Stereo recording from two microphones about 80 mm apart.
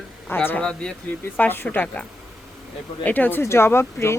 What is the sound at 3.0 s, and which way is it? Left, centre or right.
A woman's voice, left.